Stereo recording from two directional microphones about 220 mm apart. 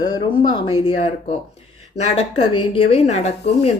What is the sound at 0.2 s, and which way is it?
Speech, 20° left (ahead or behind).